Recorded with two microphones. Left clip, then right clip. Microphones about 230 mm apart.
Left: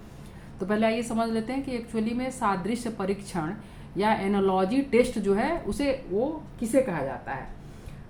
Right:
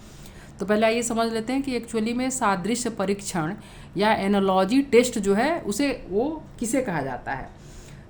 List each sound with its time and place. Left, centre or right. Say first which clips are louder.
0.6 s a woman's voice: right 4 dB; right